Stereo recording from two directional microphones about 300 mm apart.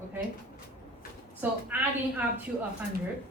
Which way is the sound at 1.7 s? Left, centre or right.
Centre.